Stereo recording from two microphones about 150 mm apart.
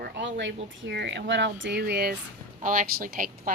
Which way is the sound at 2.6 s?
65° right (ahead or behind).